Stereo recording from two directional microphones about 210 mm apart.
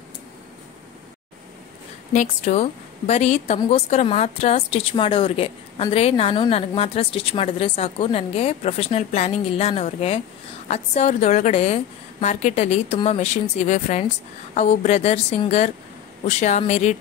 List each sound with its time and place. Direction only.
2.1 s a woman's voice: 35° left (ahead or behind)